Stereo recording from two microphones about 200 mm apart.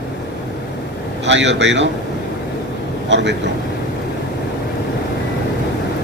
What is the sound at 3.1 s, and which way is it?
Speech, 60° right (ahead or behind).